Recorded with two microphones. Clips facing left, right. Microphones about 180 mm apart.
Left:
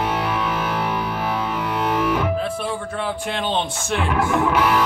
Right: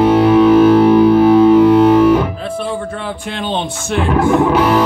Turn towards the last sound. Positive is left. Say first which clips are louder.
# right 7 dB
turn(degrees=-35)  # may be behind; listen again after turning